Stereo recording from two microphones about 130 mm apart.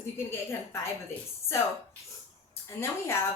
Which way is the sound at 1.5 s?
20° left (ahead or behind).